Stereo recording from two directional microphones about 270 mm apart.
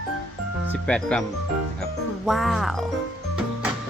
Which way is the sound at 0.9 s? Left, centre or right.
Centre.